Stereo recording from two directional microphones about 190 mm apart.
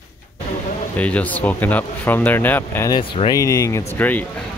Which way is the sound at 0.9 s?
5° left (ahead or behind).